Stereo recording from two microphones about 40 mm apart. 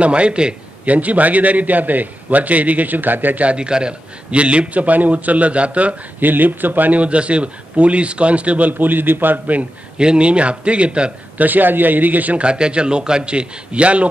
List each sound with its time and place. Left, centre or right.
0.0 s a man's voice: right
0.8 s a man's voice: right
3.4 s a man's voice: right
6.2 s a man's voice: right
7.0 s a man's voice: right
9.9 s a man's voice: right
11.3 s a man's voice: right
12.4 s a man's voice: right